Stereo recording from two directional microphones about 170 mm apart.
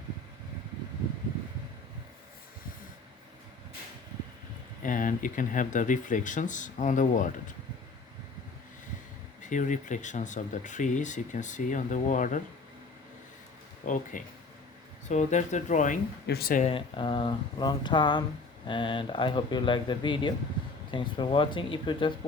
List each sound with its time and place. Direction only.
4.8 s speech: 50° left (ahead or behind)
9.4 s speech: 50° left (ahead or behind)
13.8 s speech: 50° left (ahead or behind)
16.2 s speech: 65° left (ahead or behind)
16.6 s speech: 30° left (ahead or behind)